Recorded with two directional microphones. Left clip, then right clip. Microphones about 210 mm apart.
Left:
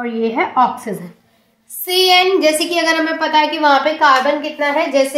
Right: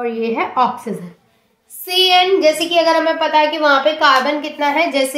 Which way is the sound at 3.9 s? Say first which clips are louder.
Left 1 dB; centre (ahead or behind).